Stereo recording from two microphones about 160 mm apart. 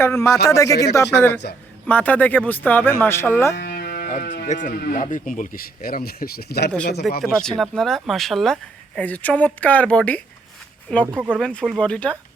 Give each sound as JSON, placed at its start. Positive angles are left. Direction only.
{"t": 0.0, "sound": "a man's voice", "side_deg": 15}
{"t": 3.5, "sound": "music", "side_deg": 85}
{"t": 4.4, "sound": "speech", "side_deg": 50}
{"t": 4.7, "sound": "speech", "side_deg": 75}
{"t": 4.9, "sound": "speech", "side_deg": 50}
{"t": 7.2, "sound": "speech", "side_deg": 0}